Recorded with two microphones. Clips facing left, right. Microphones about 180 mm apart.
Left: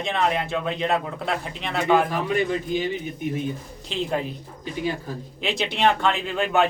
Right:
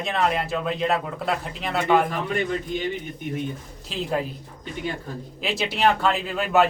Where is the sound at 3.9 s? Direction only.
5° right (ahead or behind).